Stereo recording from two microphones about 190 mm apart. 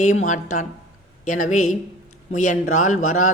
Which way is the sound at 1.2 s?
40° left (ahead or behind).